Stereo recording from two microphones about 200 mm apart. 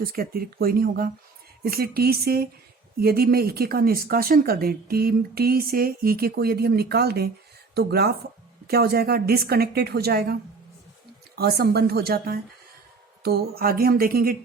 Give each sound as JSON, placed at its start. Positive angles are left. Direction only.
{"t": 0.0, "sound": "speech", "side_deg": -45}
{"t": 11.3, "sound": "speech", "side_deg": -50}